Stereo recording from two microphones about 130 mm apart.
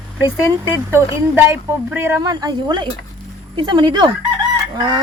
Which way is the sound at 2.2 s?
30° right (ahead or behind).